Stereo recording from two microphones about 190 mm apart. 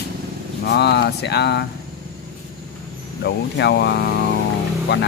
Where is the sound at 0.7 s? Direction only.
60° left (ahead or behind).